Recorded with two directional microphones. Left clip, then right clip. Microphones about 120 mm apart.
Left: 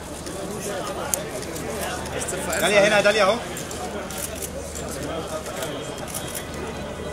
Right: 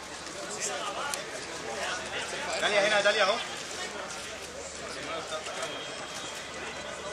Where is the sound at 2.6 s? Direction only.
30° left (ahead or behind).